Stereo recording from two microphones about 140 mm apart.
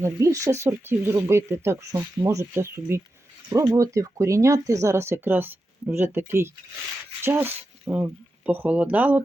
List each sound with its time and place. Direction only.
0.0 s speech: 20° right (ahead or behind)